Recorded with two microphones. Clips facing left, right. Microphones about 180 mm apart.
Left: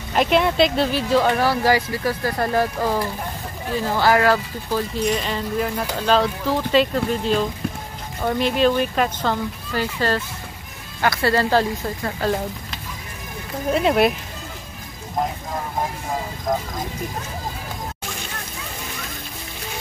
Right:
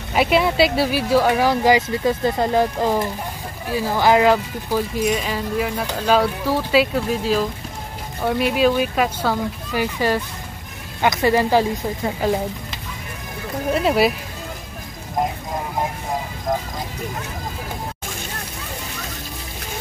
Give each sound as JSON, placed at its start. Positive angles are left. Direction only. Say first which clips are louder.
{"t": 0.1, "sound": "speech", "louder": "right 1 dB", "side_deg": -5}
{"t": 13.7, "sound": "speech", "louder": "even", "side_deg": 0}